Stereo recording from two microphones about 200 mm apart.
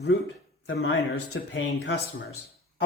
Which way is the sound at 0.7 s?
70° left (ahead or behind).